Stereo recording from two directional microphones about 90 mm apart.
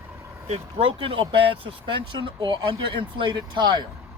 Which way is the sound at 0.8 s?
85° right.